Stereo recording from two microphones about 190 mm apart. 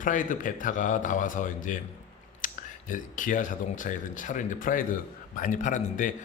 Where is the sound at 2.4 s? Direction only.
45° left (ahead or behind).